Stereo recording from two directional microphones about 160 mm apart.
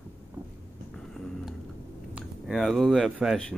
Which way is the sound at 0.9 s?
Centre (ahead or behind).